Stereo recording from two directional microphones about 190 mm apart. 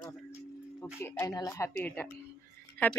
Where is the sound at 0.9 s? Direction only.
10° left (ahead or behind).